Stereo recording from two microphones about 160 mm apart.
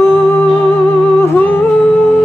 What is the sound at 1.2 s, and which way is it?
Humming, 10° left (ahead or behind).